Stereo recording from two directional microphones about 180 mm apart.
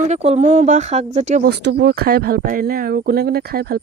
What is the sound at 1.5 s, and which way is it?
Speech, 70° right (ahead or behind).